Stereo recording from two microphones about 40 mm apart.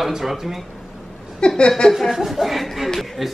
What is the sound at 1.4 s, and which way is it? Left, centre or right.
Speech, left.